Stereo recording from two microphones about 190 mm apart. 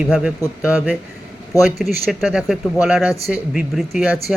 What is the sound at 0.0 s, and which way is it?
A man's voice, 5° right (ahead or behind).